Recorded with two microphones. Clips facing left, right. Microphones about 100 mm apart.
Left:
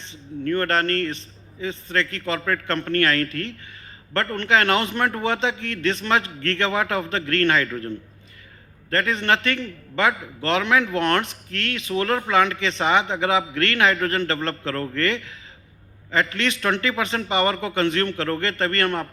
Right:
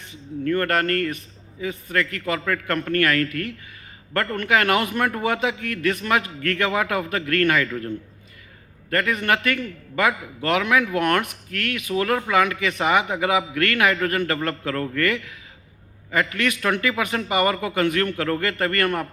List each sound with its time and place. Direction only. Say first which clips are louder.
0.1 s a man's voice: right 1 dB; 30° left (ahead or behind)
8.9 s a man's voice: even; 30° left (ahead or behind)